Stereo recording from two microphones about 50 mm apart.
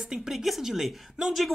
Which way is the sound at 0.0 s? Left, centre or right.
Centre.